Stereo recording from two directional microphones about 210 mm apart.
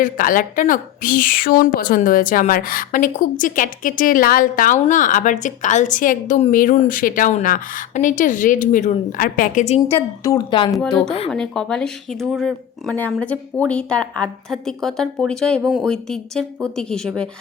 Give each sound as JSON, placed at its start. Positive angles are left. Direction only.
{"t": 0.0, "sound": "a woman's voice", "side_deg": 40}
{"t": 9.9, "sound": "a woman's voice", "side_deg": 15}
{"t": 11.3, "sound": "a woman's voice", "side_deg": 5}